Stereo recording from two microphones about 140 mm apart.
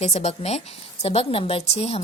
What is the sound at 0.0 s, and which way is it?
A woman's voice, 50° left (ahead or behind).